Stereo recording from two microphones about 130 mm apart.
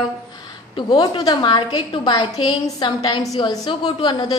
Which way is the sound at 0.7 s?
35° left (ahead or behind).